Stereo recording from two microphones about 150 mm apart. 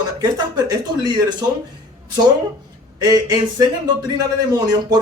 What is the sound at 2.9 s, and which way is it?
Speech, 25° right (ahead or behind).